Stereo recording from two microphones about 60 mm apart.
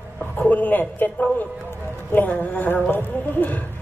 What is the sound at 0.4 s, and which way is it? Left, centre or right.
A woman's voice, left.